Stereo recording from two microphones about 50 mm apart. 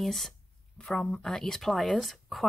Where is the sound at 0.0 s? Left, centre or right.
Centre.